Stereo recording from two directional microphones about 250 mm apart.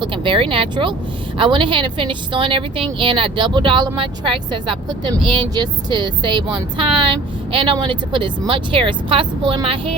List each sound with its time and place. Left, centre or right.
0.0 s a woman's voice: centre